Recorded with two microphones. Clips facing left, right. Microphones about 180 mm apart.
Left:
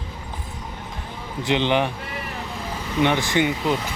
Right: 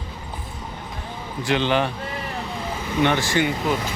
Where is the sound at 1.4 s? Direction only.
20° left (ahead or behind).